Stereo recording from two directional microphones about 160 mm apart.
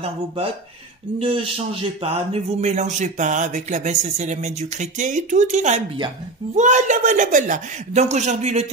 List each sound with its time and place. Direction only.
1.2 s a man's voice: 35° right (ahead or behind)